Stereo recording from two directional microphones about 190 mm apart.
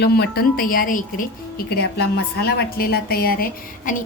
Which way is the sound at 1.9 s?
60° left (ahead or behind).